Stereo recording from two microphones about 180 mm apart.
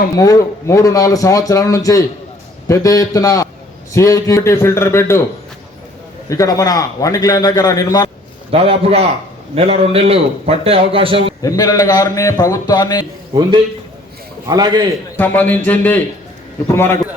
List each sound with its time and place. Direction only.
0.2 s a man's voice: 20° left (ahead or behind)
6.2 s a man's voice: 20° left (ahead or behind)
8.4 s a man's voice: 30° right (ahead or behind)
11.4 s a man's voice: 20° left (ahead or behind)
14.4 s a man's voice: 20° right (ahead or behind)
15.2 s a man's voice: 10° left (ahead or behind)